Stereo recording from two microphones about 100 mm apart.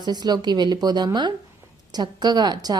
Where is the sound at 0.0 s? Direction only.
45° right (ahead or behind).